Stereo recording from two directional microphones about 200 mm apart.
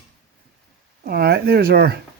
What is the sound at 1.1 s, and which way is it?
Speech, 50° right (ahead or behind).